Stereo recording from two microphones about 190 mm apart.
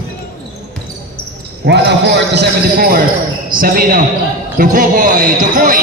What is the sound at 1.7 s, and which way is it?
Basketball bounce, 65° right (ahead or behind).